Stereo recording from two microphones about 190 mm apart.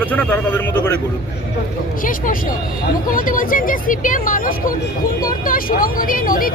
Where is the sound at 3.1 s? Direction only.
45° left (ahead or behind).